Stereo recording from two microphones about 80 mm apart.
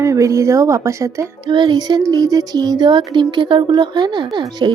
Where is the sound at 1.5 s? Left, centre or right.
Right.